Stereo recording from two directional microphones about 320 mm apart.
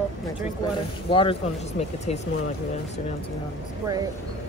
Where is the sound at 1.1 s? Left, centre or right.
Centre.